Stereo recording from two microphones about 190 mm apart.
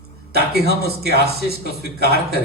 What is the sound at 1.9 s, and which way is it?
Speech, 55° right (ahead or behind).